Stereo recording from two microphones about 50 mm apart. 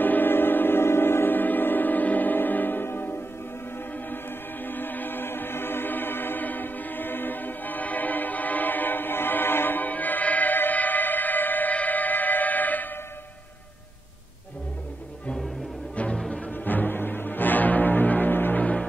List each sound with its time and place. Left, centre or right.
0.0 s music: left
16.3 s music: left
16.5 s music: left
18.6 s music: left